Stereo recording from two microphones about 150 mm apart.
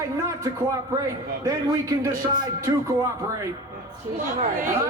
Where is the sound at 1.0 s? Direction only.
20° right (ahead or behind).